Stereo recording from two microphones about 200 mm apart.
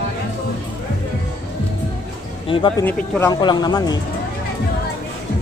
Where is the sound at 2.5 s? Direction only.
25° left (ahead or behind).